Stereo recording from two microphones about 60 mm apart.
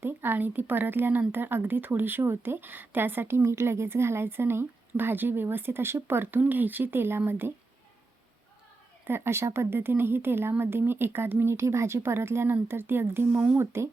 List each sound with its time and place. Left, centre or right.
0.0 s speech: right
9.0 s speech: right
11.5 s speech: right